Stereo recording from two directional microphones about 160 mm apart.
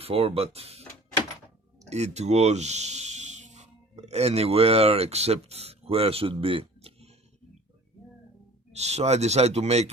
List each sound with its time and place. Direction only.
0.0 s speech: 35° right (ahead or behind)
8.7 s speech: 40° right (ahead or behind)